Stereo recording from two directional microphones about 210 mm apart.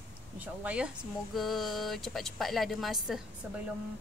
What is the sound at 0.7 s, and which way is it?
Speech, 5° right (ahead or behind).